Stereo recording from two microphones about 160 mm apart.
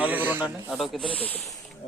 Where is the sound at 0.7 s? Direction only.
Centre (ahead or behind).